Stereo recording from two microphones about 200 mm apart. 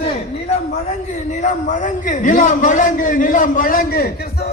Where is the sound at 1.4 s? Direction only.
35° left (ahead or behind).